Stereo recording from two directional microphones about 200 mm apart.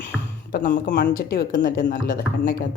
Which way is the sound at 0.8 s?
60° left (ahead or behind).